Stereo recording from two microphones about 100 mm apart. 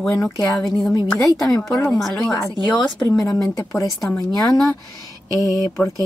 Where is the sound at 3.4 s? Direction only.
30° left (ahead or behind).